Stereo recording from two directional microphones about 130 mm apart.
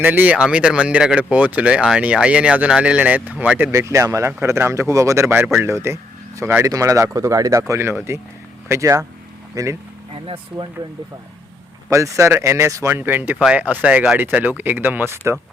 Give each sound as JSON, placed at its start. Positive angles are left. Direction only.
{"t": 0.0, "sound": "speech", "side_deg": -15}
{"t": 3.7, "sound": "speech", "side_deg": -20}
{"t": 10.2, "sound": "speech", "side_deg": -40}
{"t": 11.9, "sound": "speech", "side_deg": -25}